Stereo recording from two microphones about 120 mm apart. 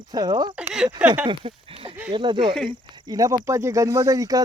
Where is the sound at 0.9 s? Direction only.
10° right (ahead or behind).